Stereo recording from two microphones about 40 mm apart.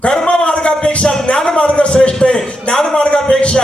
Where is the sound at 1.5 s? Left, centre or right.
Left.